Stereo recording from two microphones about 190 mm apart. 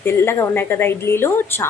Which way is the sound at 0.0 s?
10° left (ahead or behind).